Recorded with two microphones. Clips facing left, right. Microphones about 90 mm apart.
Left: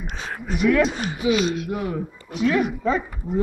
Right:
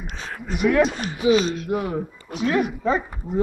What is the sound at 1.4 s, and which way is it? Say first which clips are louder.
Speech: left 2 dB; 10° left (ahead or behind).